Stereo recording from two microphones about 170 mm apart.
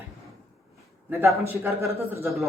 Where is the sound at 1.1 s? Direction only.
15° right (ahead or behind).